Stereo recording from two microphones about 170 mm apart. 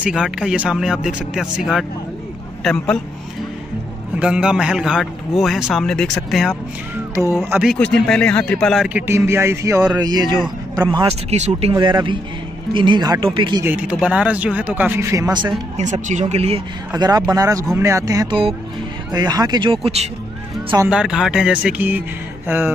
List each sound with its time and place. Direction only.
0.0 s a man's voice: 5° right (ahead or behind)
4.2 s a man's voice: 5° right (ahead or behind)
7.4 s speech: 10° right (ahead or behind)
7.7 s a man's voice: 5° left (ahead or behind); by 11.7 s 40° right (ahead or behind)
11.7 s speech: 25° right (ahead or behind)
13.7 s speech: 5° right (ahead or behind); by 15.5 s 25° right (ahead or behind)
15.8 s speech: 45° right (ahead or behind)
16.9 s speech: 20° right (ahead or behind)
20.9 s a man's voice: 5° right (ahead or behind)